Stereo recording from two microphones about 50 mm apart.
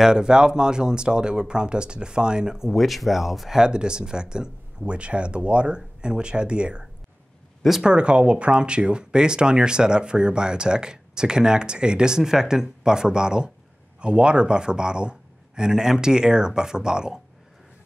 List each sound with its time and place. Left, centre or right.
0.0 s speech: centre